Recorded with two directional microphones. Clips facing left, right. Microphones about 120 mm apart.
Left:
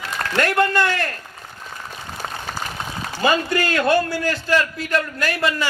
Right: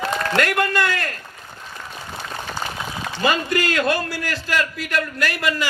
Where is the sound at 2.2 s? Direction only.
45° left (ahead or behind).